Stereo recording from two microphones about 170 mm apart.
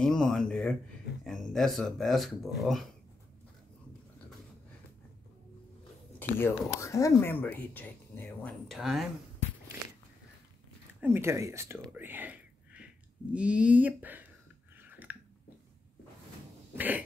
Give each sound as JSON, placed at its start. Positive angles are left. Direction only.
{"t": 0.0, "sound": "a sound", "side_deg": 5}
{"t": 1.2, "sound": "speech", "side_deg": 0}
{"t": 6.1, "sound": "speech", "side_deg": 10}
{"t": 11.0, "sound": "speech", "side_deg": -15}
{"t": 12.0, "sound": "a sound", "side_deg": -10}
{"t": 13.3, "sound": "speech", "side_deg": -5}
{"t": 14.8, "sound": "chewing", "side_deg": -10}
{"t": 16.7, "sound": "cough", "side_deg": -10}